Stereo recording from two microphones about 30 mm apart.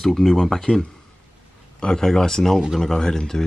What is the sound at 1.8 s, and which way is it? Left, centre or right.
Speech, centre.